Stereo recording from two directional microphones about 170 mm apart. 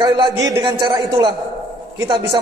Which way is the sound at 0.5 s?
25° right (ahead or behind).